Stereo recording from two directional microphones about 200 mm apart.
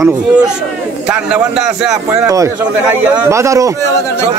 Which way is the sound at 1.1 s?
5° right (ahead or behind).